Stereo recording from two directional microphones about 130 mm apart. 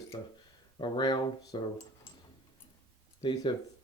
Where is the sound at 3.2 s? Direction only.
35° left (ahead or behind).